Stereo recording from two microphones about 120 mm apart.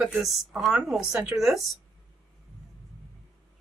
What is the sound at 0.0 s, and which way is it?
Speech, 5° right (ahead or behind).